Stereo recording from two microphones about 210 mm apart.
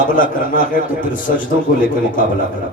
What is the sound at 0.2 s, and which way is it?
A man's voice, 40° left (ahead or behind).